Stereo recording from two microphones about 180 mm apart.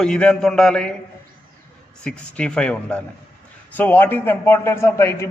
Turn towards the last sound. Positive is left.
turn(degrees=15)  # may be behind; listen again after turning